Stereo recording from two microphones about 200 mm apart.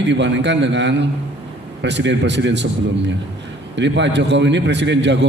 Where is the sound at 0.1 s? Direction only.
60° right (ahead or behind).